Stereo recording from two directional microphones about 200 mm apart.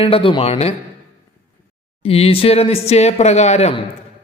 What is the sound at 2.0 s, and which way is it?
Speech, 30° left (ahead or behind).